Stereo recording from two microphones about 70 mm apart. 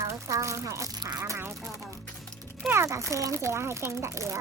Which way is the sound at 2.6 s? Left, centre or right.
Right.